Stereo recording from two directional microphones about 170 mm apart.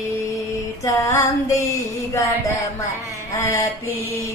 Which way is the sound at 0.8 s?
20° left (ahead or behind).